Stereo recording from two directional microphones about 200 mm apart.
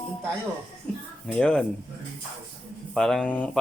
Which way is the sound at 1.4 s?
5° left (ahead or behind).